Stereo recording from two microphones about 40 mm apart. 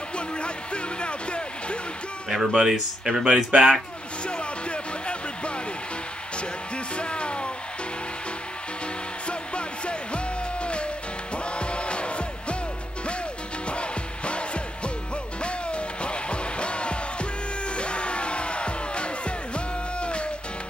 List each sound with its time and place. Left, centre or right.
0.4 s speech: left
2.2 s speech: centre
4.3 s music: left
7.0 s music: left
9.3 s music: left
13.7 s music: left